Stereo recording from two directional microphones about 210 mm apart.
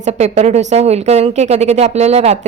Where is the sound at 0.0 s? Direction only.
30° right (ahead or behind).